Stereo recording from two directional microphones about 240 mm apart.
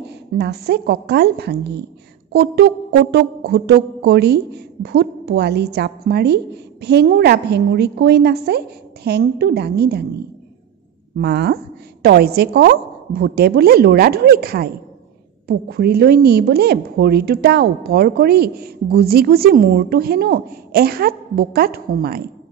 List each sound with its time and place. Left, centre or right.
0.4 s a woman's voice: right
11.1 s a woman's voice: right